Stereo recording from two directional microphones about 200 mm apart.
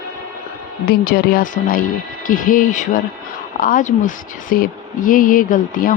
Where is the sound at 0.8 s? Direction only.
50° left (ahead or behind).